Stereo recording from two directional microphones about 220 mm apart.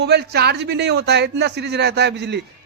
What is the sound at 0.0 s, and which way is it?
A man's voice, 50° right (ahead or behind).